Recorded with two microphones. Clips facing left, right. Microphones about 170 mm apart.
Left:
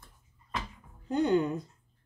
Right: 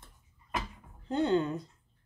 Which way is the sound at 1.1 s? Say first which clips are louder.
Left 2 dB; 15° left (ahead or behind).